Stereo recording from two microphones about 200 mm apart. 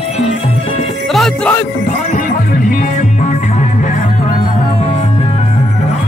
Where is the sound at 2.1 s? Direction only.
45° left (ahead or behind).